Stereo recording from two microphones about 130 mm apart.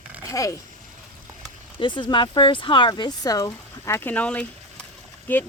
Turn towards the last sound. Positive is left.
turn(degrees=15)  # may be behind; listen again after turning